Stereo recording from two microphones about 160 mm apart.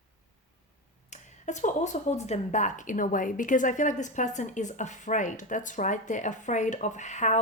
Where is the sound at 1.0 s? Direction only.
45° left (ahead or behind).